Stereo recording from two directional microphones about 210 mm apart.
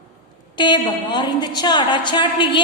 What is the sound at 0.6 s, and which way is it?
A woman's voice, 20° left (ahead or behind).